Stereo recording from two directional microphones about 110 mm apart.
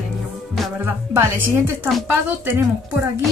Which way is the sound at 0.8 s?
20° right (ahead or behind).